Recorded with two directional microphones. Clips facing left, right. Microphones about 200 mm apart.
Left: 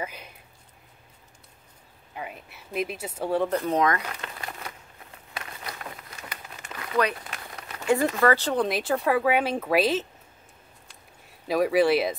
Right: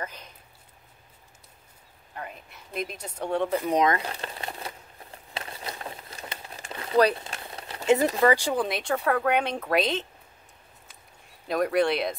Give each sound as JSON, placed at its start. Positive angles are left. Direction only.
{"t": 0.0, "sound": "speech", "side_deg": 10}
{"t": 2.1, "sound": "speech", "side_deg": 5}
{"t": 3.6, "sound": "speech", "side_deg": -20}
{"t": 5.3, "sound": "crumpling", "side_deg": -30}
{"t": 8.2, "sound": "speech", "side_deg": -15}
{"t": 8.6, "sound": "speech", "side_deg": 0}
{"t": 11.4, "sound": "speech", "side_deg": 5}